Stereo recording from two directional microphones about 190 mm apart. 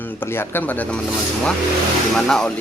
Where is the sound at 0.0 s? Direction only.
10° left (ahead or behind).